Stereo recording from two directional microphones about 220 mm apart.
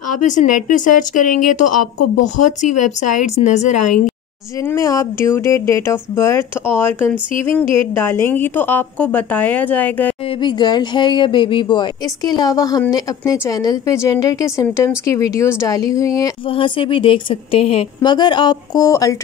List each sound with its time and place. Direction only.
0.2 s speech: 35° left (ahead or behind)
4.6 s speech: 15° left (ahead or behind)
10.4 s speech: 20° left (ahead or behind)